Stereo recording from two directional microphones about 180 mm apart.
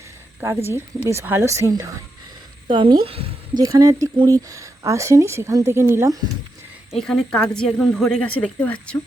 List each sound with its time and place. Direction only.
0.3 s a woman's voice: 15° right (ahead or behind); by 3.2 s 30° right (ahead or behind)
3.6 s speech: 20° right (ahead or behind)
6.9 s a woman's voice: centre (ahead or behind)